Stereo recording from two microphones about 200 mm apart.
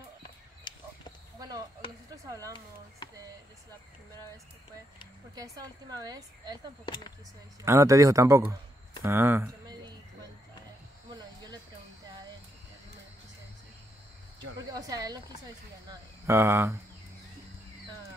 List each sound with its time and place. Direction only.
2.2 s speech: 15° right (ahead or behind)
5.3 s a woman's voice: 20° right (ahead or behind)
7.6 s speech: 15° right (ahead or behind)
14.7 s a woman's voice: 20° right (ahead or behind)